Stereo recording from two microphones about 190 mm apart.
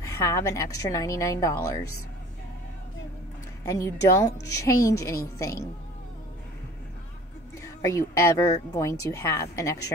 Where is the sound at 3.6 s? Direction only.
15° left (ahead or behind).